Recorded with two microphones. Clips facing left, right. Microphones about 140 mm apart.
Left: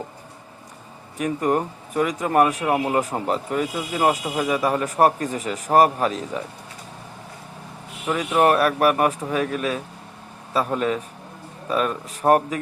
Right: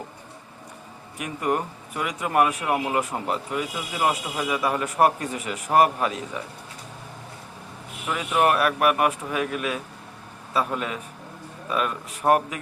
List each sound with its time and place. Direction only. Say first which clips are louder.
1.2 s a man's voice: left 4 dB; 40° left (ahead or behind)
8.0 s a man's voice: left 3 dB; 35° left (ahead or behind)